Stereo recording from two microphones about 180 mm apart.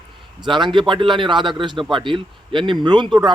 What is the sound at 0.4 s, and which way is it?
Speech, 25° right (ahead or behind).